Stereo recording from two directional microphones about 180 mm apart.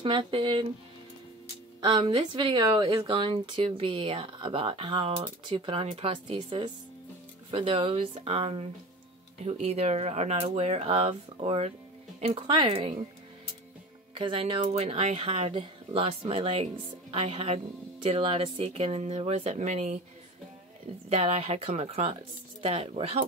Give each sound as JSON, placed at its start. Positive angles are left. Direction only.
{"t": 0.0, "sound": "speech", "side_deg": -30}
{"t": 1.8, "sound": "speech", "side_deg": -25}
{"t": 14.1, "sound": "speech", "side_deg": -30}
{"t": 21.1, "sound": "speech", "side_deg": -35}